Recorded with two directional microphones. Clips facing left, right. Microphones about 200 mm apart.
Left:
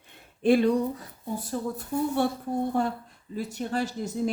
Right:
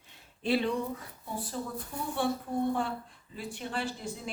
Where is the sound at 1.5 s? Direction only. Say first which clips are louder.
Left 7 dB; 55° left (ahead or behind).